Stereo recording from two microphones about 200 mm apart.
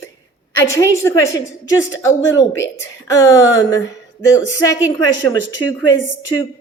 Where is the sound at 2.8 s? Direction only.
15° left (ahead or behind).